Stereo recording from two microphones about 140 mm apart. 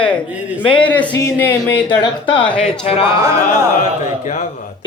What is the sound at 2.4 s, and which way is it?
Speech, 10° left (ahead or behind).